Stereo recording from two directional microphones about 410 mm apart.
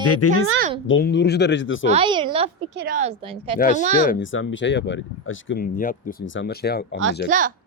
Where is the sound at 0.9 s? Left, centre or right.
Left.